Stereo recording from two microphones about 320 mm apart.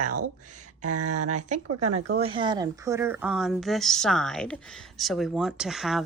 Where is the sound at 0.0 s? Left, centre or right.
Right.